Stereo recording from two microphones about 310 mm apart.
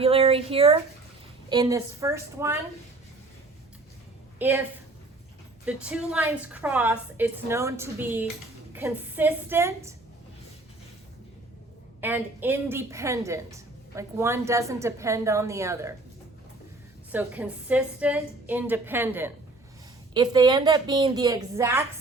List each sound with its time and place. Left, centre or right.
0.0 s a woman's voice: centre
4.4 s a woman's voice: centre
5.6 s a woman's voice: centre
11.9 s a woman's voice: centre
17.1 s a woman's voice: centre
20.3 s a woman's voice: centre